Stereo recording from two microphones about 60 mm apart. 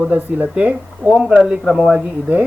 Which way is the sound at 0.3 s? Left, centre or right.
Right.